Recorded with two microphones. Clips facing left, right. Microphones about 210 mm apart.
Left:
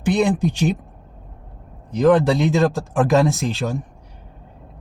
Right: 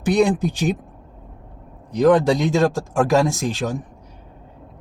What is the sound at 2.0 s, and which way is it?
Speech, 15° right (ahead or behind).